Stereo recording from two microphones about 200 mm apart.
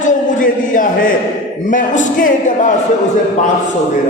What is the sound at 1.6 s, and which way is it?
A man's voice, 40° left (ahead or behind).